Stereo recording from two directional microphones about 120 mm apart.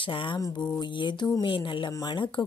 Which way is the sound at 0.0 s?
45° left (ahead or behind).